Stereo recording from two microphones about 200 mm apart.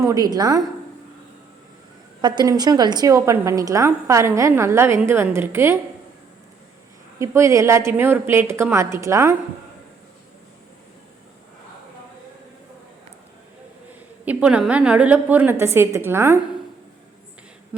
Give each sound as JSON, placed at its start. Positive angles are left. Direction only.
{"t": 0.0, "sound": "a woman's voice", "side_deg": -20}
{"t": 2.2, "sound": "a woman's voice", "side_deg": -20}
{"t": 7.2, "sound": "a woman's voice", "side_deg": -15}
{"t": 14.3, "sound": "a woman's voice", "side_deg": -5}